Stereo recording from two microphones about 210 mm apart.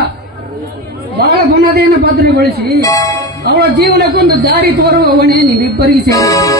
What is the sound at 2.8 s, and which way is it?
Speech, 15° left (ahead or behind).